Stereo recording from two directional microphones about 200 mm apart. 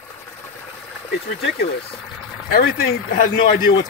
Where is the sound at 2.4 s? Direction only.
50° left (ahead or behind).